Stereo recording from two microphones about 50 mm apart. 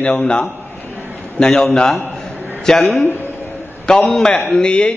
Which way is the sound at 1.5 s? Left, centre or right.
Centre.